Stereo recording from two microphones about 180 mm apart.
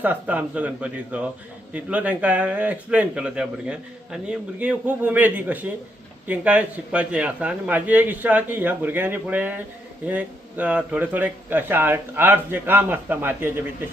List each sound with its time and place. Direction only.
0.0 s speech: 10° right (ahead or behind)